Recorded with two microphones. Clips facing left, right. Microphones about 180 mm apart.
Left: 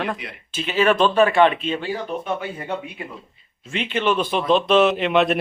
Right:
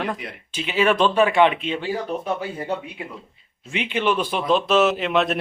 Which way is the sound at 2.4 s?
30° right (ahead or behind).